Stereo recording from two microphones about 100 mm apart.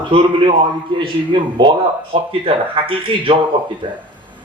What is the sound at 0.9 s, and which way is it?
A man's voice, 55° right (ahead or behind).